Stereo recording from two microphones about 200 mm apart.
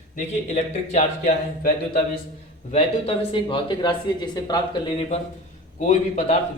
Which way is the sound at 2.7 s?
25° left (ahead or behind).